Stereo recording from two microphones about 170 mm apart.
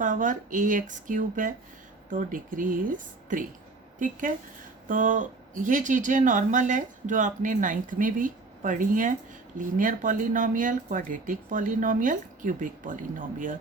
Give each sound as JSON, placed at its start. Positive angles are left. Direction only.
{"t": 0.0, "sound": "speech", "side_deg": -50}